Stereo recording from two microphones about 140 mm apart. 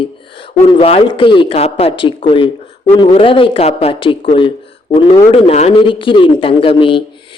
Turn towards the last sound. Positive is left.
turn(degrees=40)  # may be behind; listen again after turning